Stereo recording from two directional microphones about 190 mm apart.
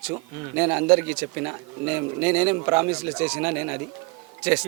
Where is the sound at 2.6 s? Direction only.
20° right (ahead or behind).